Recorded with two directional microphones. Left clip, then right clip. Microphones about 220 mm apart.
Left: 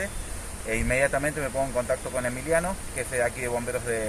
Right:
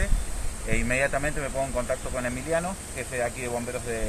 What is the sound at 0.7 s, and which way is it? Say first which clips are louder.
Speech: left 1 dB; 10° left (ahead or behind).